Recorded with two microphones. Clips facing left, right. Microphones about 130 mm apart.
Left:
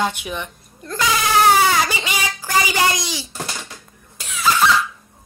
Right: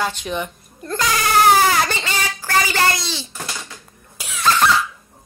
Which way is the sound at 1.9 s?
15° left (ahead or behind).